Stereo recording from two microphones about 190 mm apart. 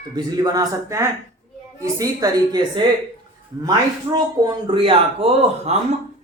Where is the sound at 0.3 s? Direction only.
20° right (ahead or behind).